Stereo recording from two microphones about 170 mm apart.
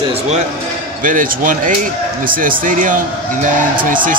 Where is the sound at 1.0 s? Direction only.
55° right (ahead or behind).